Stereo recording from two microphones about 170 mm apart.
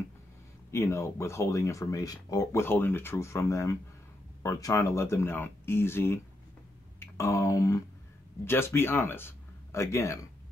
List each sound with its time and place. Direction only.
0.7 s speech: 15° left (ahead or behind)
7.0 s a sound: 20° left (ahead or behind)
8.5 s speech: 15° left (ahead or behind)